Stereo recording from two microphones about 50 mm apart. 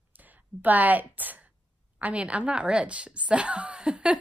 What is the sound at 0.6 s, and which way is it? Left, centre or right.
A woman's voice, right.